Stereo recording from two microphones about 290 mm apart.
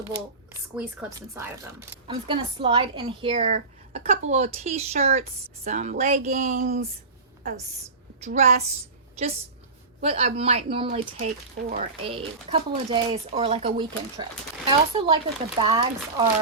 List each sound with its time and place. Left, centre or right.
1.3 s a woman's voice: centre; by 6.8 s right
8.2 s a woman's voice: right
10.0 s a woman's voice: right